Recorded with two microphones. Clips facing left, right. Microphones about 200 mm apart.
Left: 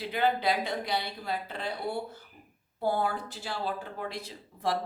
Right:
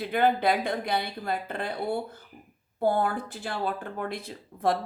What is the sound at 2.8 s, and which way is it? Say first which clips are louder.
Speech: right 4 dB; 50° right (ahead or behind).